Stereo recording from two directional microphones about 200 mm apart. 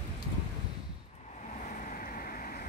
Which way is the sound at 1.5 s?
40° left (ahead or behind).